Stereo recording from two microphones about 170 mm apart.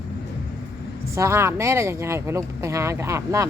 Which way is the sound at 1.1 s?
15° right (ahead or behind).